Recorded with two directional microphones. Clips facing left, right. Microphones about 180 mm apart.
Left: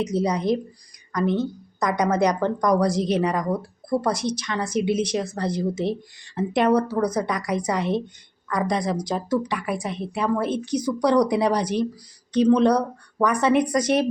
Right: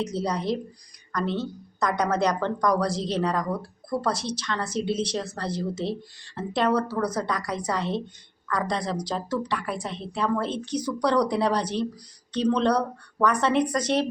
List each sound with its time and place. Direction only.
0.0 s a woman's voice: 15° left (ahead or behind)